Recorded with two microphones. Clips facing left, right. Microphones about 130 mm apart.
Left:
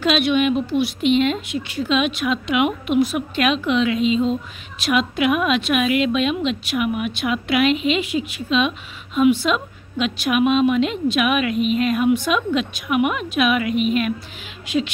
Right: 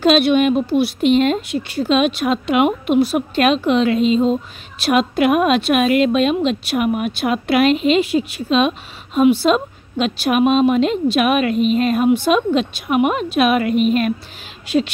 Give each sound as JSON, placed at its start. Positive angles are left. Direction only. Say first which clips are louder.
{"t": 0.0, "sound": "speech", "louder": "right 5 dB", "side_deg": -40}